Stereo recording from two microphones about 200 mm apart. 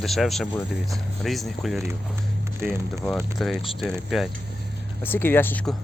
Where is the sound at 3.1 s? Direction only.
Centre (ahead or behind).